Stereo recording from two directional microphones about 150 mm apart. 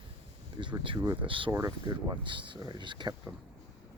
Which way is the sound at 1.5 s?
25° right (ahead or behind).